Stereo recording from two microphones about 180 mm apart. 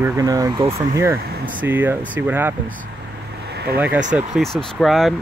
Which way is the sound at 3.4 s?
65° right (ahead or behind).